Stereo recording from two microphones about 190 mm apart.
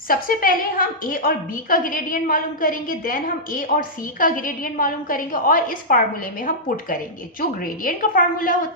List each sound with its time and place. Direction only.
0.1 s a woman's voice: 50° left (ahead or behind)
7.4 s a woman's voice: 45° left (ahead or behind)